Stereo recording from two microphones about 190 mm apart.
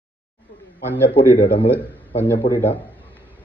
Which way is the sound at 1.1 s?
25° left (ahead or behind).